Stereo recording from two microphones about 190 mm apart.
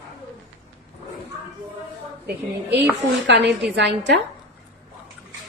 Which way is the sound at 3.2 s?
65° right (ahead or behind).